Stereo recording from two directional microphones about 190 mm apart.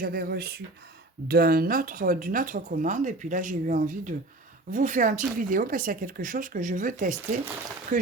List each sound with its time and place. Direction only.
0.0 s speech: 50° right (ahead or behind)